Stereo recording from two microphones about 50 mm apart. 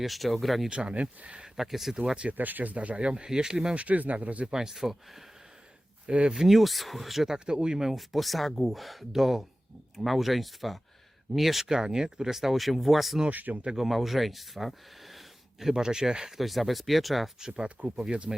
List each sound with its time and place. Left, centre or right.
0.0 s speech: centre
0.7 s speech: right
1.5 s speech: centre
2.4 s speech: right; by 3.8 s centre
3.8 s speech: right
4.5 s speech: centre
6.1 s speech: right
6.3 s speech: centre
7.3 s speech: centre
13.3 s speech: right
13.7 s speech: centre
16.4 s speech: centre
17.9 s speech: centre